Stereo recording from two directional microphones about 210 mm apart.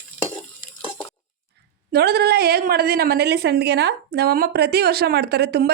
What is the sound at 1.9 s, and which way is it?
A woman's voice, 50° right (ahead or behind).